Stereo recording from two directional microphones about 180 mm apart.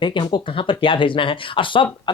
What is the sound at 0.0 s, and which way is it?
Speech, 25° left (ahead or behind).